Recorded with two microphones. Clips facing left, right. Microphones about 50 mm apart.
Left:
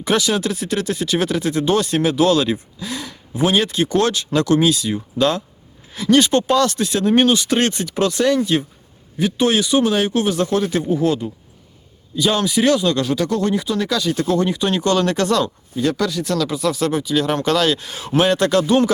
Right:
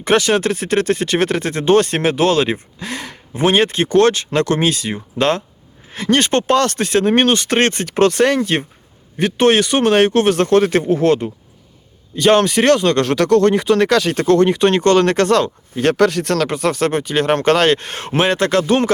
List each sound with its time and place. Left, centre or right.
0.0 s speech: right
15.7 s speech: right
18.2 s speech: right